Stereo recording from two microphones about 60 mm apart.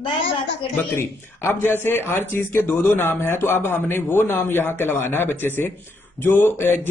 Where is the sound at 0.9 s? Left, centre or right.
Left.